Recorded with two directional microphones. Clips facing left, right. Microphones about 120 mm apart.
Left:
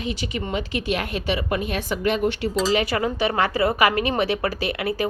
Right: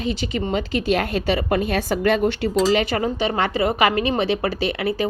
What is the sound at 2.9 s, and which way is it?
Speech, 35° right (ahead or behind).